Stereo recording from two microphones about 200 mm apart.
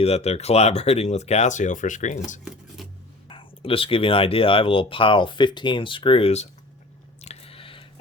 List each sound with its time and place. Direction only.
0.0 s speech: 30° left (ahead or behind)
3.2 s speech: 25° left (ahead or behind)
7.2 s squish: 30° left (ahead or behind)